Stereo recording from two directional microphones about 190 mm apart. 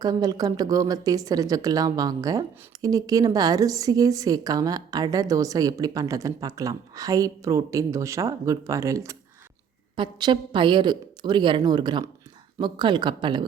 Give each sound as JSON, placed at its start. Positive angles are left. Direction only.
{"t": 0.0, "sound": "a woman's voice", "side_deg": -20}